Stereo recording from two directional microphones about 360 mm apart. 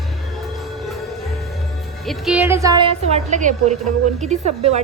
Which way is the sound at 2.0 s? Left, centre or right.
Centre.